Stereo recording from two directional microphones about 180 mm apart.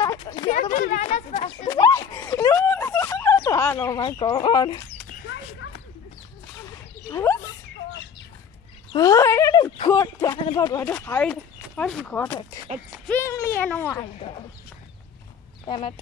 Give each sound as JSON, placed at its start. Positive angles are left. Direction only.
{"t": 0.2, "sound": "speech", "side_deg": 25}
{"t": 0.5, "sound": "speech", "side_deg": 45}
{"t": 1.7, "sound": "a sound", "side_deg": 15}
{"t": 7.1, "sound": "speech", "side_deg": 15}
{"t": 8.9, "sound": "speech", "side_deg": 20}
{"t": 14.0, "sound": "speech", "side_deg": 30}
{"t": 15.6, "sound": "speech", "side_deg": 25}